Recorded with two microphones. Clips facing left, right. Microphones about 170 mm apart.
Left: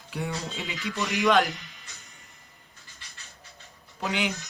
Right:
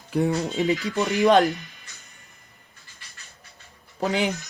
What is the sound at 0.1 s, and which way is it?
Speech, 50° right (ahead or behind).